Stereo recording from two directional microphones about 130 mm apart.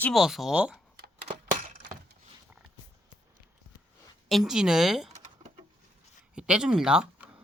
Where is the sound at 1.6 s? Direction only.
90° right.